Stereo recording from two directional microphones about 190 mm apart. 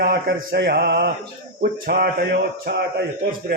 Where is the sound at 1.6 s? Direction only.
50° right (ahead or behind).